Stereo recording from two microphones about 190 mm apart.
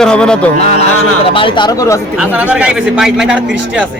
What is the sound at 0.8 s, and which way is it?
Speech, 30° left (ahead or behind).